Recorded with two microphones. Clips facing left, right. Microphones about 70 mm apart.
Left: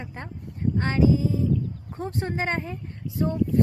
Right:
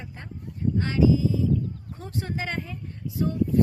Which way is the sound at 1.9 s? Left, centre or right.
Left.